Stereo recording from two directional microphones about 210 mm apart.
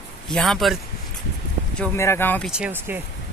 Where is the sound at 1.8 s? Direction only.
10° left (ahead or behind).